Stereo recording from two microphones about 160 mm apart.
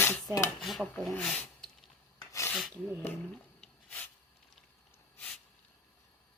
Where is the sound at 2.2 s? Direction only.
20° left (ahead or behind).